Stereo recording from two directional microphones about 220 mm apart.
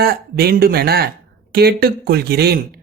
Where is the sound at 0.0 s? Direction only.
45° right (ahead or behind).